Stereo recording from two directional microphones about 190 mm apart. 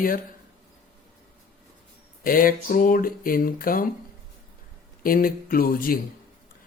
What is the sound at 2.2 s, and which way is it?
Speech, 50° left (ahead or behind).